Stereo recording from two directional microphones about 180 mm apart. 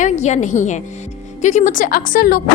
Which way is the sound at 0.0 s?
40° left (ahead or behind).